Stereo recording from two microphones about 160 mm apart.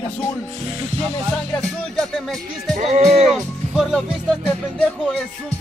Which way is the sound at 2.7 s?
40° right (ahead or behind).